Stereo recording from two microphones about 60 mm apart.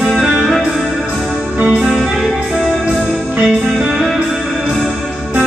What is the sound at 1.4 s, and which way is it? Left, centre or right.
Music, centre.